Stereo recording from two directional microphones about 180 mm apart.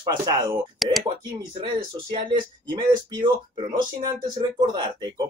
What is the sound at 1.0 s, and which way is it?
Speech, 30° right (ahead or behind).